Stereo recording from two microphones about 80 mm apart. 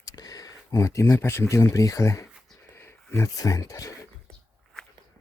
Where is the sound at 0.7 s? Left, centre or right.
Left.